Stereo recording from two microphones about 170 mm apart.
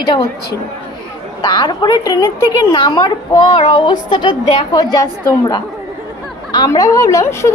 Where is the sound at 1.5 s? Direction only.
25° left (ahead or behind).